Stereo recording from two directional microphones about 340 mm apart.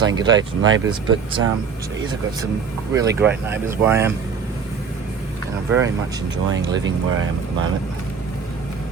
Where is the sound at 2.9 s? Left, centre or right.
Centre.